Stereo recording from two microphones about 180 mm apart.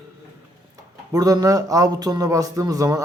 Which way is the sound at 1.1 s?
20° right (ahead or behind).